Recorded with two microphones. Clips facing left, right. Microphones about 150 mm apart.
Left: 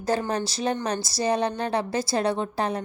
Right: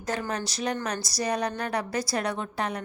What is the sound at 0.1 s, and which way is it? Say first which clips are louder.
A woman's voice: left 5 dB; 30° left (ahead or behind).